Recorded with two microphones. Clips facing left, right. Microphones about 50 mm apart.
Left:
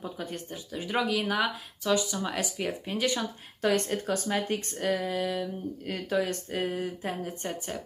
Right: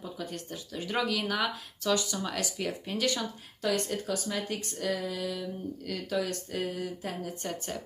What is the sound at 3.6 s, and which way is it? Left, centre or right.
Speech, left.